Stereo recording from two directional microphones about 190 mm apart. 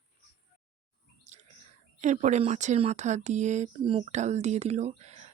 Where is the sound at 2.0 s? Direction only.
40° right (ahead or behind).